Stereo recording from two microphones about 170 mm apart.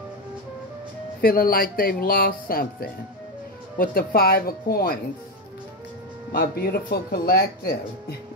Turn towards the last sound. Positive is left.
turn(degrees=65)  # may be behind; listen again after turning